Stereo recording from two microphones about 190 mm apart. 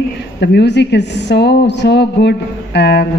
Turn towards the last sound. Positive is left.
turn(degrees=60)  # may be behind; listen again after turning